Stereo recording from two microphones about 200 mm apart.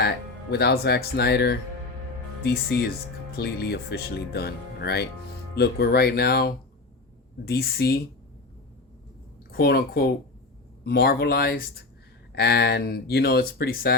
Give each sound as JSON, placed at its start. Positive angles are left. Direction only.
{"t": 0.5, "sound": "speech", "side_deg": 55}
{"t": 9.5, "sound": "speech", "side_deg": 50}